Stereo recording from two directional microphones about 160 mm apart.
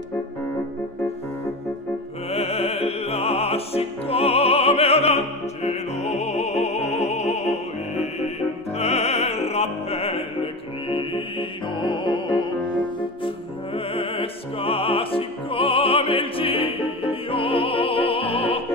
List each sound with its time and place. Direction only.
2.3 s music: 40° left (ahead or behind)
13.7 s music: 35° left (ahead or behind)